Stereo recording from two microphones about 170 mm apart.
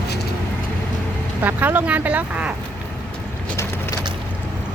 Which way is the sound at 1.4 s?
10° right (ahead or behind).